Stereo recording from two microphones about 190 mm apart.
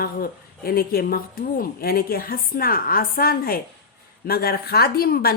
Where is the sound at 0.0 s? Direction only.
50° left (ahead or behind).